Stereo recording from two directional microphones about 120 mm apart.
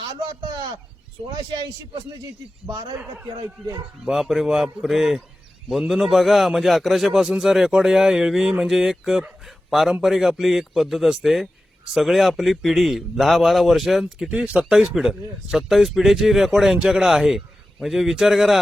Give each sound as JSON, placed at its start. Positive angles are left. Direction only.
{"t": 1.9, "sound": "speech", "side_deg": -45}
{"t": 2.9, "sound": "speech", "side_deg": -10}
{"t": 3.4, "sound": "speech", "side_deg": -35}
{"t": 4.0, "sound": "a man's voice", "side_deg": 0}